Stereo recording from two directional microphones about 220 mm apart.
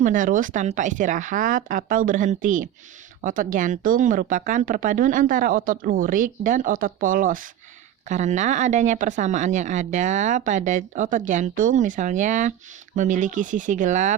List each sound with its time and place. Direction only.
0.0 s speech: 35° right (ahead or behind)